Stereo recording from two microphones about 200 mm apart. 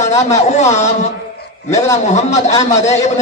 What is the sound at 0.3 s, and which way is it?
A man's voice, 35° left (ahead or behind).